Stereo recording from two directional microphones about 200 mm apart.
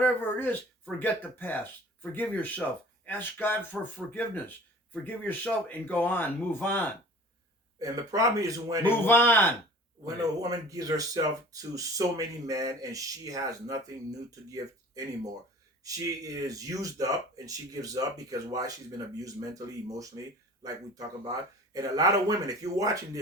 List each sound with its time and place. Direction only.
0.0 s speech: 10° left (ahead or behind)
7.8 s speech: 15° right (ahead or behind)
8.8 s speech: 10° left (ahead or behind)
10.2 s speech: 20° right (ahead or behind)